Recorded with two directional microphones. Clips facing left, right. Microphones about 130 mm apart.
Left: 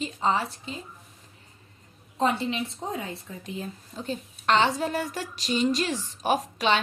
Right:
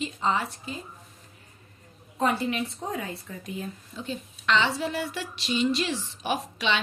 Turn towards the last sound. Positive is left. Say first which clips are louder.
# left 4 dB
turn(degrees=45)  # may be behind; listen again after turning